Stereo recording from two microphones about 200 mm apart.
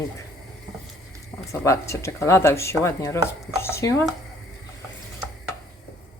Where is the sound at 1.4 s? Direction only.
15° left (ahead or behind).